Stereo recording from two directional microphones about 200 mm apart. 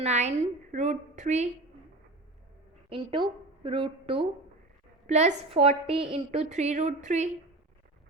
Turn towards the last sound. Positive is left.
turn(degrees=-35)  # may be behind; listen again after turning